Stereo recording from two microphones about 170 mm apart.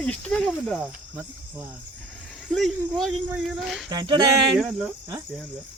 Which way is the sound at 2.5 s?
Centre (ahead or behind).